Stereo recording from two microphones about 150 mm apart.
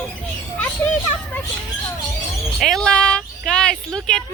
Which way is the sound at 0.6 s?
10° left (ahead or behind).